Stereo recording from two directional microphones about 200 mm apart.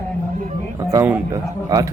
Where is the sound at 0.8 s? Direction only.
15° right (ahead or behind).